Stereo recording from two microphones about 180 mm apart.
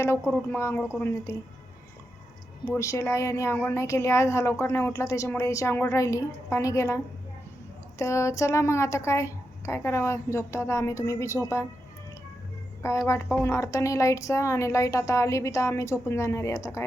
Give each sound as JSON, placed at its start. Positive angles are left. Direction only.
{"t": 0.5, "sound": "a woman's voice", "side_deg": 15}
{"t": 2.6, "sound": "a woman's voice", "side_deg": 15}
{"t": 12.8, "sound": "a woman's voice", "side_deg": 15}